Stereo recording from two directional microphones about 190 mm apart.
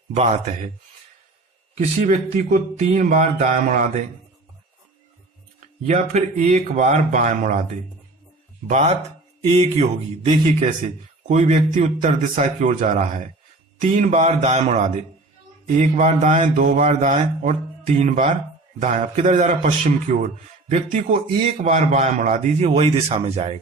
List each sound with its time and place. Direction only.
0.1 s speech: 35° right (ahead or behind)
1.8 s speech: 40° right (ahead or behind)
5.9 s speech: 40° right (ahead or behind)
8.6 s speech: 40° right (ahead or behind)